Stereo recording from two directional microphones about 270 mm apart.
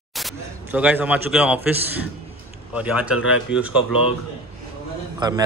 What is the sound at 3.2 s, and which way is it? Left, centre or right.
Speech, left.